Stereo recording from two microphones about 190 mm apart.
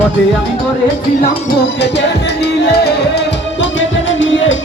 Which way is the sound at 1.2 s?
55° left (ahead or behind).